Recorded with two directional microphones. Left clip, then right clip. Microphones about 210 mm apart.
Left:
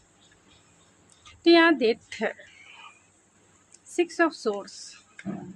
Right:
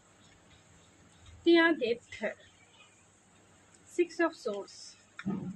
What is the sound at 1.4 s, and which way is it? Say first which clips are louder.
Speech: left 7 dB; 55° left (ahead or behind).